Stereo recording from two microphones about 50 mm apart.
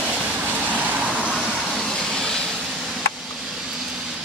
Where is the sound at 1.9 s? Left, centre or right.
Centre.